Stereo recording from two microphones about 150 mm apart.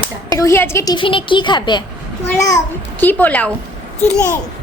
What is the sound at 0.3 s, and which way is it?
Speech, 20° left (ahead or behind).